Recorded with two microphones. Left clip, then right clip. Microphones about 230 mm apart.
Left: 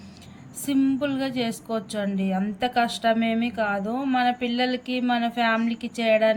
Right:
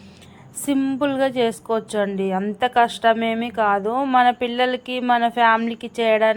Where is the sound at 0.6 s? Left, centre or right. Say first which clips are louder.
Right 3 dB; centre.